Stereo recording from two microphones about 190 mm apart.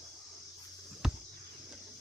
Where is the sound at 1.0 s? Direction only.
5° right (ahead or behind).